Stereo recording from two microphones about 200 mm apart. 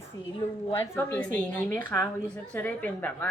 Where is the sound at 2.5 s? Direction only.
10° left (ahead or behind).